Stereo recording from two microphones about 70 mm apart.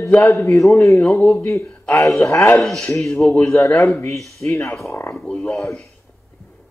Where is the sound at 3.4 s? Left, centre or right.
Left.